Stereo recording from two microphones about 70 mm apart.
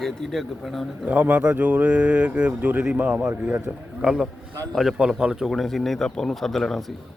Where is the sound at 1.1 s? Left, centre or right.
Right.